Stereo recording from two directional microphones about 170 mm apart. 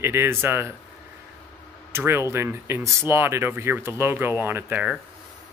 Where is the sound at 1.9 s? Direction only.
15° right (ahead or behind).